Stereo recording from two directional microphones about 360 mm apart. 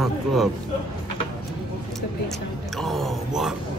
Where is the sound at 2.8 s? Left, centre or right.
Centre.